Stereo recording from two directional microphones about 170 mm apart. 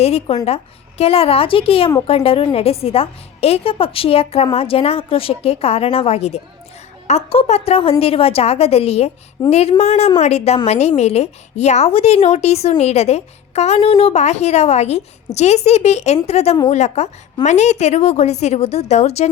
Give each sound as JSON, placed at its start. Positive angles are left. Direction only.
{"t": 0.0, "sound": "a woman's voice", "side_deg": 35}